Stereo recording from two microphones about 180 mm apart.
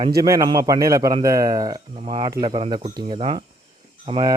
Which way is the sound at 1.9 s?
30° right (ahead or behind).